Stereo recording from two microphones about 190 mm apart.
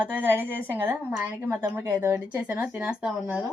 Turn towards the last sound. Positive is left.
turn(degrees=-5)  # may be behind; listen again after turning